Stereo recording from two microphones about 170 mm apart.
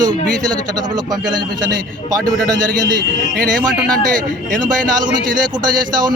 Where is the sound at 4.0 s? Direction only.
50° right (ahead or behind).